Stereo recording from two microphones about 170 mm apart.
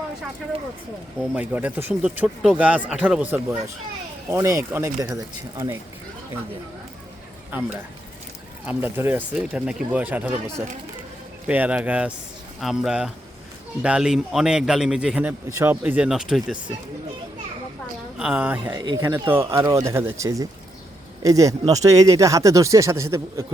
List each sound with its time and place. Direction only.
1.4 s speech: 10° right (ahead or behind)
7.5 s speech: 10° right (ahead or behind)
11.4 s a man's voice: 10° right (ahead or behind)
18.2 s speech: 5° right (ahead or behind)
18.7 s speech: 25° right (ahead or behind)